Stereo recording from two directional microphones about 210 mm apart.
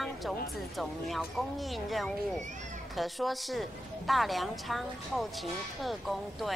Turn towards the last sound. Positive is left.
turn(degrees=0)  # may be behind; listen again after turning